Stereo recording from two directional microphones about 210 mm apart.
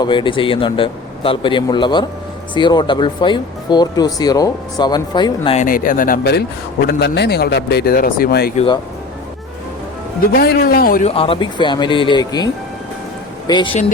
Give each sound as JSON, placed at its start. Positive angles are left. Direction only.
{"t": 0.0, "sound": "speech", "side_deg": 25}
{"t": 5.6, "sound": "speech", "side_deg": 40}
{"t": 8.5, "sound": "speech", "side_deg": 25}
{"t": 10.3, "sound": "speech", "side_deg": 50}
{"t": 11.1, "sound": "speech", "side_deg": 25}
{"t": 13.5, "sound": "speech", "side_deg": 20}